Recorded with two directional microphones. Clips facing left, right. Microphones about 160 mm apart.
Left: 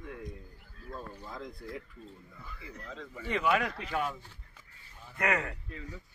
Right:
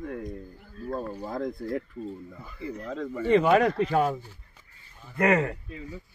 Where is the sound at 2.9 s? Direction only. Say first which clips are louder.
Right 12 dB; 50° right (ahead or behind).